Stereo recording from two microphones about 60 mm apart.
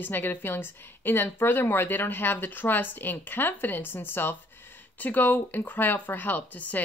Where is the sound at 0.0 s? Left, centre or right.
Left.